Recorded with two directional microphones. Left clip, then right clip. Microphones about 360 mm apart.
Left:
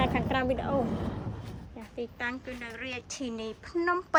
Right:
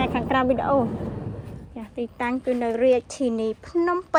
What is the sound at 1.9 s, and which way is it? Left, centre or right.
Speech, centre.